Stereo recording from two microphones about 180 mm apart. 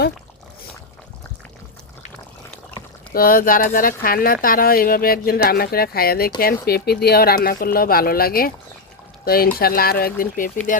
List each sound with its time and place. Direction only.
3.1 s speech: 55° left (ahead or behind)